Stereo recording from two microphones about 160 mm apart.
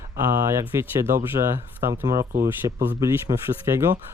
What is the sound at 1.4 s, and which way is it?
Speech, 40° right (ahead or behind).